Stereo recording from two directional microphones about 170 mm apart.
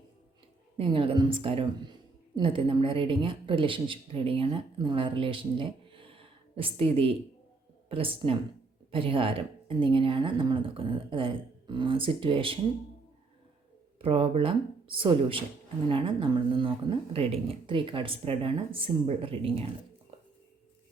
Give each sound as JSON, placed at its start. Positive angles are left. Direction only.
{"t": 0.8, "sound": "a woman's voice", "side_deg": -30}
{"t": 14.0, "sound": "speech", "side_deg": -35}